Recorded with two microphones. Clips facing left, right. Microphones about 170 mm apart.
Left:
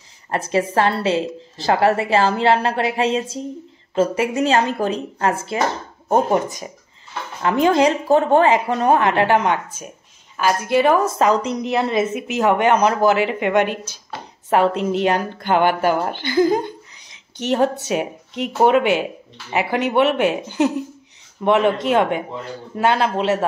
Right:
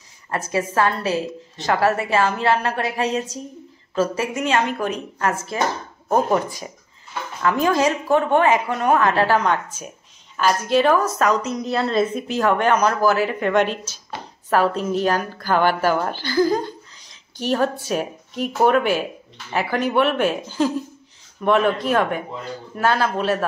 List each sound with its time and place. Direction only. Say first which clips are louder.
0.3 s a woman's voice: left 3 dB; 25° left (ahead or behind)
10.3 s speech: left 1 dB; 10° left (ahead or behind)
11.1 s a woman's voice: left 3 dB; 25° left (ahead or behind)
11.7 s a woman's voice: even; 15° left (ahead or behind)
13.4 s a woman's voice: left 1 dB; 15° left (ahead or behind)